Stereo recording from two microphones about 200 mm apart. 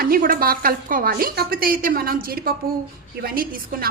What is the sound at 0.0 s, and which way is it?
A woman's voice, 45° right (ahead or behind).